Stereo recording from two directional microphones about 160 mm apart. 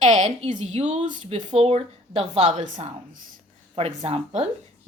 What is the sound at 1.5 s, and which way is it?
A woman's voice, 40° right (ahead or behind).